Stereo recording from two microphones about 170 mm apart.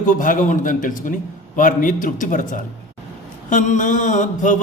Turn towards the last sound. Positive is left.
turn(degrees=45)  # may be behind; listen again after turning